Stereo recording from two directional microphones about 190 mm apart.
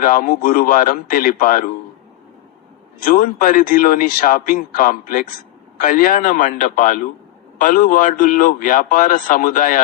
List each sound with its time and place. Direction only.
0.0 s a man's voice: 50° left (ahead or behind)
3.0 s a man's voice: 50° left (ahead or behind)